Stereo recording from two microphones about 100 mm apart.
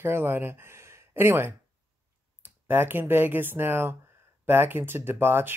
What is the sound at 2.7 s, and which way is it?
Speech, 20° right (ahead or behind).